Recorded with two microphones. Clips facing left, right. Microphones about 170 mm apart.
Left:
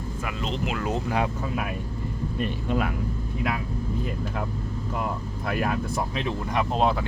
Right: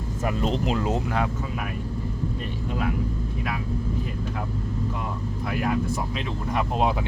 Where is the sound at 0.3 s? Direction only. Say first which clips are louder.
Right 5 dB; 40° right (ahead or behind).